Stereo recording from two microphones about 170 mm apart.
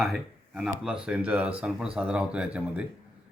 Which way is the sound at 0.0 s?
Centre (ahead or behind).